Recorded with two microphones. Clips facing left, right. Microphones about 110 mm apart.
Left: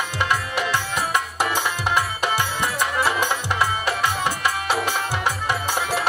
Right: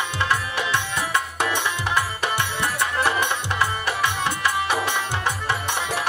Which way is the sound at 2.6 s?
15° left (ahead or behind).